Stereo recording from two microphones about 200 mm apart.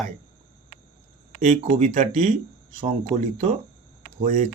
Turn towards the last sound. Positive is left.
turn(degrees=-35)  # may be behind; listen again after turning